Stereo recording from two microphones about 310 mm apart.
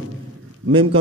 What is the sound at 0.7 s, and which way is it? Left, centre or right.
Speech, centre.